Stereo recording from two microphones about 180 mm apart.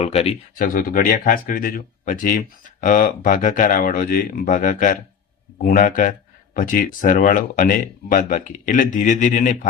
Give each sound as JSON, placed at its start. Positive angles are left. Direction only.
{"t": 0.0, "sound": "speech", "side_deg": 35}
{"t": 0.7, "sound": "speech", "side_deg": 50}